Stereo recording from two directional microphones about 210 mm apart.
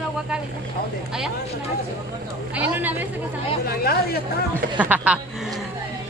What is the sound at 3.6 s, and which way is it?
Speech, 45° left (ahead or behind).